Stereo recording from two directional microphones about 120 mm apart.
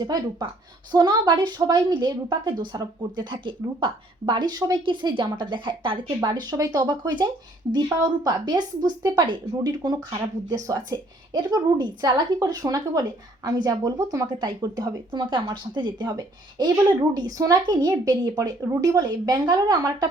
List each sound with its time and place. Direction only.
0.0 s a woman's voice: 35° right (ahead or behind)